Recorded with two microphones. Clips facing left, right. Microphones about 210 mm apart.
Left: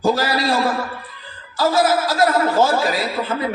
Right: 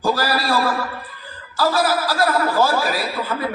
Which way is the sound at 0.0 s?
20° left (ahead or behind).